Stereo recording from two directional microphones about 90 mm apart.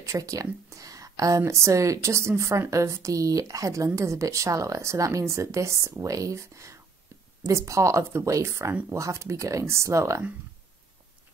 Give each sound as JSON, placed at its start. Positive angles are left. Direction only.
{"t": 0.0, "sound": "speech", "side_deg": -40}